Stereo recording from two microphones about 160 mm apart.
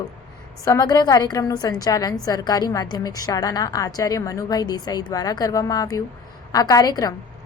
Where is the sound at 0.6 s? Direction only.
20° left (ahead or behind).